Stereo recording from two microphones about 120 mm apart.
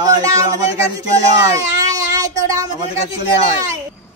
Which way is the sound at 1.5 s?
30° right (ahead or behind).